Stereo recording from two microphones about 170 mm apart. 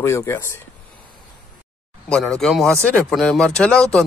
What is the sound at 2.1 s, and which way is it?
Speech, 5° left (ahead or behind).